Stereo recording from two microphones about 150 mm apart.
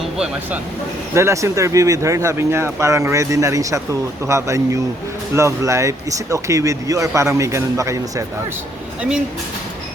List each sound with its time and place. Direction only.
1.1 s speech: 20° right (ahead or behind)